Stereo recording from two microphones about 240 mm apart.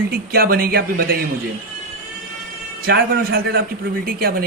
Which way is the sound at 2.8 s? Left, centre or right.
Right.